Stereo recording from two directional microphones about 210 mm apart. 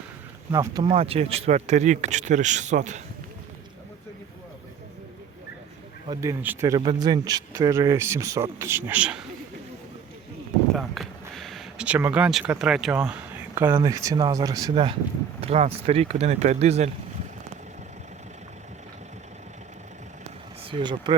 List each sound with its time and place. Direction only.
0.5 s speech: 15° right (ahead or behind); by 3.0 s 35° right (ahead or behind)
6.1 s speech: 15° right (ahead or behind)
10.8 s speech: centre (ahead or behind); by 14.9 s 20° right (ahead or behind)
15.4 s speech: 30° right (ahead or behind)
20.7 s speech: 25° right (ahead or behind)